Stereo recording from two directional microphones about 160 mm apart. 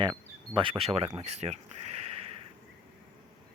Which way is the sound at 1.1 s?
45° right (ahead or behind).